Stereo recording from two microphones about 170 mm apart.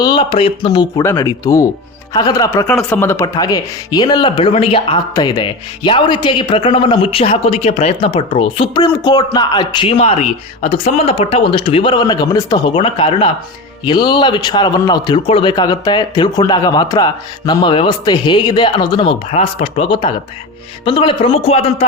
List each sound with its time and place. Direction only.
0.0 s speech: 30° left (ahead or behind)
2.6 s a man's voice: 10° left (ahead or behind); by 21.8 s 35° left (ahead or behind)